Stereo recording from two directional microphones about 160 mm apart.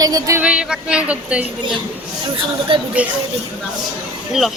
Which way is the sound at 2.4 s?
30° right (ahead or behind).